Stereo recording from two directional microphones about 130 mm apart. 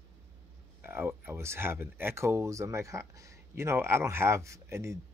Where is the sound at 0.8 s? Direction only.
15° right (ahead or behind).